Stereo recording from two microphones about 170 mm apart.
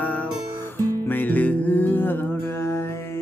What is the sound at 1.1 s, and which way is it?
Music, 10° left (ahead or behind).